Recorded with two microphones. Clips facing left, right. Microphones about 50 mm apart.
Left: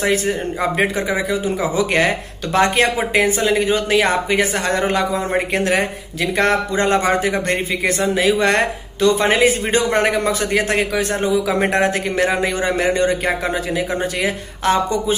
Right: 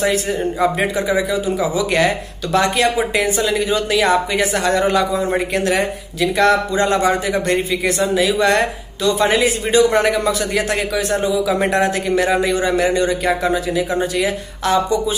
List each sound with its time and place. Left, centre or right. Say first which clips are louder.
0.0 s speech: right 1 dB; left